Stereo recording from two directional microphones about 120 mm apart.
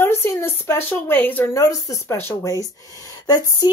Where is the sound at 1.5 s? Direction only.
30° left (ahead or behind).